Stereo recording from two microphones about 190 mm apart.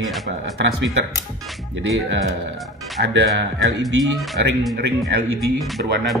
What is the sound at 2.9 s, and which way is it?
Speech, 60° right (ahead or behind).